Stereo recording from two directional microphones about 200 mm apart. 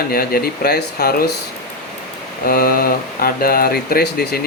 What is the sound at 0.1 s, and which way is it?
Speech, 50° left (ahead or behind).